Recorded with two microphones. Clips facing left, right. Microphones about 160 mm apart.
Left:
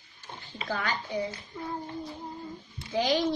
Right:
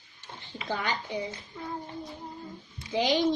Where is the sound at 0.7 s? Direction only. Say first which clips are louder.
Right 1 dB; 25° right (ahead or behind).